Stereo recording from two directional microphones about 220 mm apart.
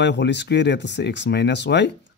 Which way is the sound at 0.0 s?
50° left (ahead or behind).